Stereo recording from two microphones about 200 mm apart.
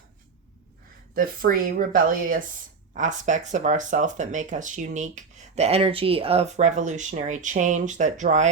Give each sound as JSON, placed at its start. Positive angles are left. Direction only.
{"t": 1.1, "sound": "speech", "side_deg": -45}